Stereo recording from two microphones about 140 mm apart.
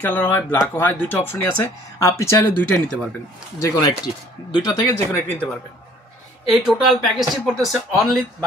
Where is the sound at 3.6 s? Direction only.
30° left (ahead or behind).